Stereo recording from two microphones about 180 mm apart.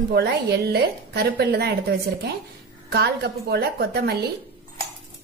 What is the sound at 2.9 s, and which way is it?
Speech, 65° right (ahead or behind).